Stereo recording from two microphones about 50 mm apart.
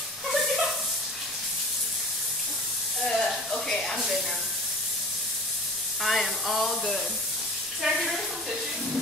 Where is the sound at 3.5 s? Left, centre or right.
Centre.